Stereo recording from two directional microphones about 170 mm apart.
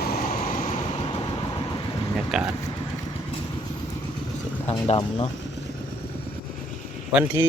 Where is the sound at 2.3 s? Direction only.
Centre (ahead or behind).